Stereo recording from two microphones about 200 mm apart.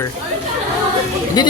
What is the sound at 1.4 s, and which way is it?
Speech, 20° left (ahead or behind).